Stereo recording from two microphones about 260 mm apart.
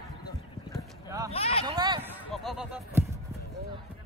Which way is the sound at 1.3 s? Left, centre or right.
Left.